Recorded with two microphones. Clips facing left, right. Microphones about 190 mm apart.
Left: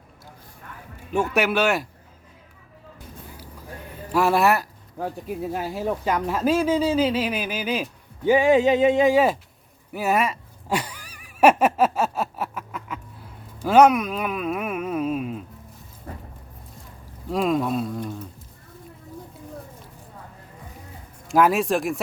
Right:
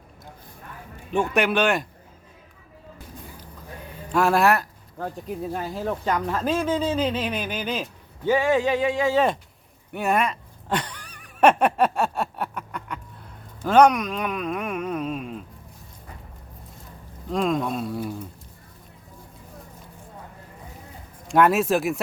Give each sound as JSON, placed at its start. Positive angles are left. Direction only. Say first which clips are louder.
{"t": 1.1, "sound": "speech", "louder": "even", "side_deg": 5}
{"t": 4.1, "sound": "speech", "louder": "even", "side_deg": 0}
{"t": 9.9, "sound": "a sound", "louder": "left 1 dB", "side_deg": 5}
{"t": 13.6, "sound": "speech", "louder": "left 1 dB", "side_deg": 5}
{"t": 16.1, "sound": "music", "louder": "left 8 dB", "side_deg": 45}
{"t": 17.2, "sound": "speech", "louder": "left 1 dB", "side_deg": 5}
{"t": 21.2, "sound": "speech", "louder": "even", "side_deg": 0}